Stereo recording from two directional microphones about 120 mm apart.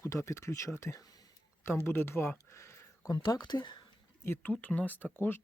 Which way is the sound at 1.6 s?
20° left (ahead or behind).